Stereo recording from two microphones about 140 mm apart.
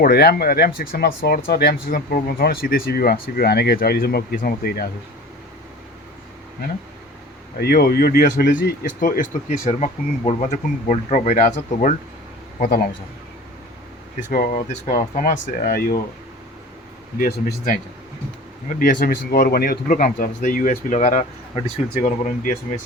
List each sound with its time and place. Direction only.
0.0 s speech: 90° left
7.7 s speech: 90° left; by 9.6 s 70° left (ahead or behind)
9.6 s a man's voice: 50° left (ahead or behind)
14.2 s speech: 70° left (ahead or behind)
17.2 s speech: 90° left
18.8 s speech: 90° left; by 22.1 s 55° left (ahead or behind)